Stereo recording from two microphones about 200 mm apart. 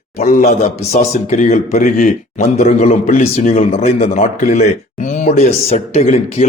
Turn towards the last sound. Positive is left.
turn(degrees=30)  # may be behind; listen again after turning